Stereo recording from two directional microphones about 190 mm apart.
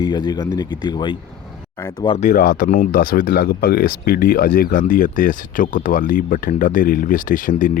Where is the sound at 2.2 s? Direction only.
40° left (ahead or behind).